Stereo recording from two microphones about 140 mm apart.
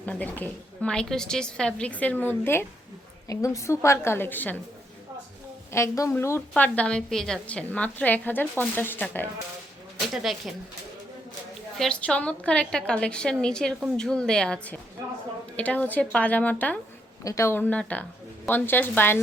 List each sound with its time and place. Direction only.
0.0 s a woman's voice: 10° left (ahead or behind)
5.7 s a woman's voice: 20° left (ahead or behind)
10.3 s speech: centre (ahead or behind)
11.8 s a woman's voice: 5° left (ahead or behind)